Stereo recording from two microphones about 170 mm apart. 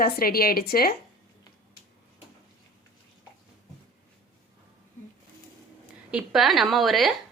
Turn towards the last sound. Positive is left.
turn(degrees=0)  # may be behind; listen again after turning